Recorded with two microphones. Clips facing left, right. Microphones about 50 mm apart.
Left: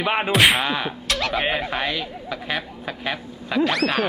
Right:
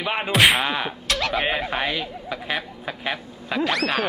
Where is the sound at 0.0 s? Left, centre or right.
Centre.